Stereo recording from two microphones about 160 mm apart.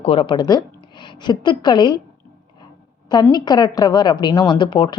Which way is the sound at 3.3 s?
25° left (ahead or behind).